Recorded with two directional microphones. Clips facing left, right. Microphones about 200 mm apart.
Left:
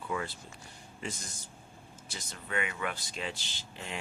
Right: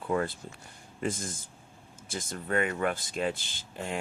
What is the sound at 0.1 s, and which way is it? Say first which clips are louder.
Speech: right 7 dB; 50° right (ahead or behind).